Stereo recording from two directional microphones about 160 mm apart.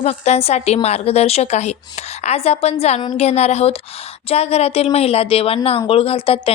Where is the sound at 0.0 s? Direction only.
40° left (ahead or behind).